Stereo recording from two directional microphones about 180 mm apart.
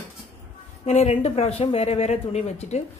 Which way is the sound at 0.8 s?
35° left (ahead or behind).